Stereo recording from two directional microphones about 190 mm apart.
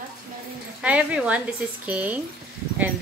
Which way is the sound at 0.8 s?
5° right (ahead or behind).